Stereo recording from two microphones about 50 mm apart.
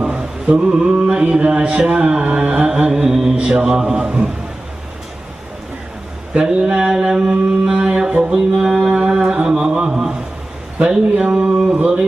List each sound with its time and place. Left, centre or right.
0.6 s mantra: centre
3.1 s mantra: centre
6.3 s mantra: centre
8.3 s music: centre
9.3 s mantra: centre
10.8 s a man's voice: right